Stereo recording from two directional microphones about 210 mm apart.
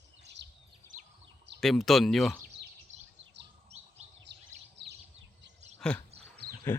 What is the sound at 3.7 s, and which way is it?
Bird, 30° right (ahead or behind).